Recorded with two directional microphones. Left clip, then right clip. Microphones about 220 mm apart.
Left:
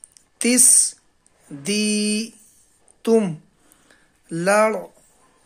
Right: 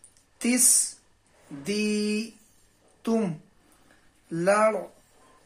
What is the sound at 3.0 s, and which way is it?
Speech, 40° left (ahead or behind).